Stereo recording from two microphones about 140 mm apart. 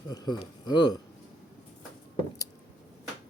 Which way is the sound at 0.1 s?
30° left (ahead or behind).